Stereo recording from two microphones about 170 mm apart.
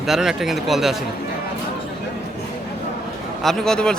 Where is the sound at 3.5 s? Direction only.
5° left (ahead or behind).